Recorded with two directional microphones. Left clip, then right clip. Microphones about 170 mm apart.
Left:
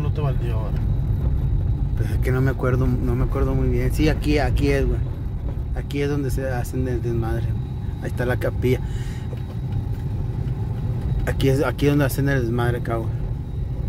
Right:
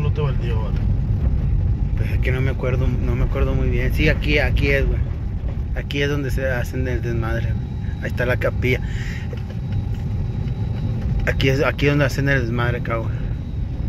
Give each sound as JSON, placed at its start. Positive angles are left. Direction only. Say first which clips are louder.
{"t": 2.2, "sound": "speech", "louder": "left 1 dB", "side_deg": 35}
{"t": 3.1, "sound": "speech", "louder": "even", "side_deg": 20}
{"t": 5.9, "sound": "speech", "louder": "right 2 dB", "side_deg": 20}
{"t": 11.2, "sound": "speech", "louder": "right 2 dB", "side_deg": 20}